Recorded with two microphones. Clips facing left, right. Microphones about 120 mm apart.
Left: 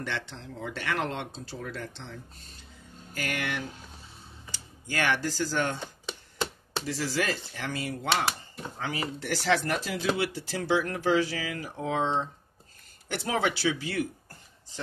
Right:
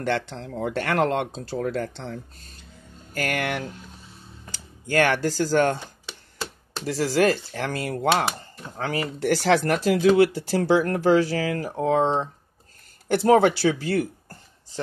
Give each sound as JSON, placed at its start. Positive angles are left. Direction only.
{"t": 0.0, "sound": "speech", "side_deg": -50}
{"t": 6.9, "sound": "speech", "side_deg": -50}